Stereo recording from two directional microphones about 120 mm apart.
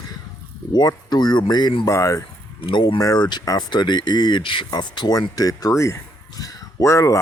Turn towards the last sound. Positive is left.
turn(degrees=25)  # may be behind; listen again after turning